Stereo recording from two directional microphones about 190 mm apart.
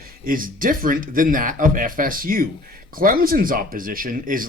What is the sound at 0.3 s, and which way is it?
Speech, 45° right (ahead or behind).